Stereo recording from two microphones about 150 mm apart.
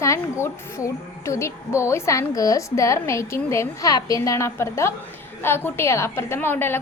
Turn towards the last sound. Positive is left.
turn(degrees=15)  # may be behind; listen again after turning